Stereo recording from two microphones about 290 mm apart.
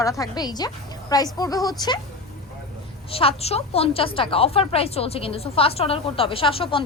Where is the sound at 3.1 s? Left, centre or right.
Centre.